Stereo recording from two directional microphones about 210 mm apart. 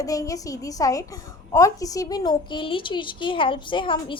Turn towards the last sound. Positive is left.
turn(degrees=25)  # may be behind; listen again after turning